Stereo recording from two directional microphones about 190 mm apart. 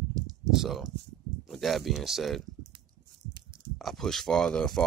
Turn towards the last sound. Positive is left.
turn(degrees=5)  # may be behind; listen again after turning